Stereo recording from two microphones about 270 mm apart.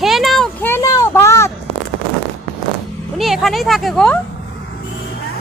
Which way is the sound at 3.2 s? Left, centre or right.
Centre.